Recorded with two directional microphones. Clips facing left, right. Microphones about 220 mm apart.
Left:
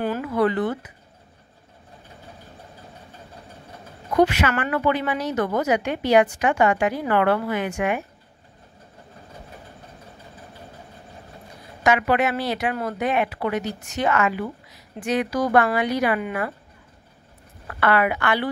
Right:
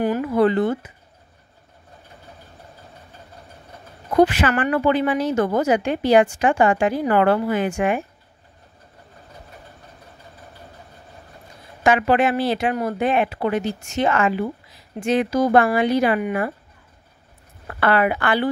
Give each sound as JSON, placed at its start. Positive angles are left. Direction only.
{"t": 0.2, "sound": "a sound", "side_deg": -30}
{"t": 4.1, "sound": "speech", "side_deg": -30}
{"t": 11.8, "sound": "speech", "side_deg": -30}
{"t": 17.6, "sound": "speech", "side_deg": -30}